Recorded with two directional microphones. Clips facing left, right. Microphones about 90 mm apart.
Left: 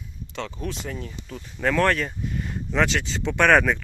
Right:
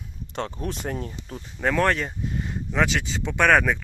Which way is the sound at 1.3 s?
15° right (ahead or behind).